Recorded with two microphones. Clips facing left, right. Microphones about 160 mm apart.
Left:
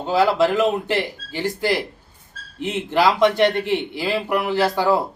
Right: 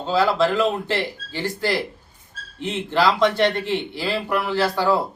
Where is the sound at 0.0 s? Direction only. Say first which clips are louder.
Left 2 dB; 15° left (ahead or behind).